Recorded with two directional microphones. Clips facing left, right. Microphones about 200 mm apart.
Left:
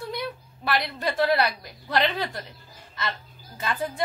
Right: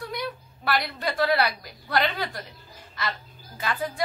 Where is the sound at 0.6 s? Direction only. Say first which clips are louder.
Even; 20° left (ahead or behind).